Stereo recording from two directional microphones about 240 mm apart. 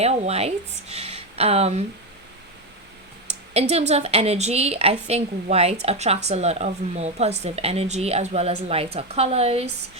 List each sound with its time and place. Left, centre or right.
0.0 s speech: right
3.5 s a woman's voice: right